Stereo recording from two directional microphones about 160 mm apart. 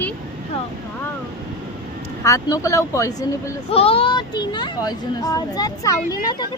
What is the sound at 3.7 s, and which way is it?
Speech, 35° left (ahead or behind).